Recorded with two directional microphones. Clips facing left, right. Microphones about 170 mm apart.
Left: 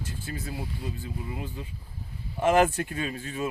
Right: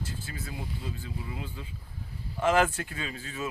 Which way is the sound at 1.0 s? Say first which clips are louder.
Left 3 dB; 15° left (ahead or behind).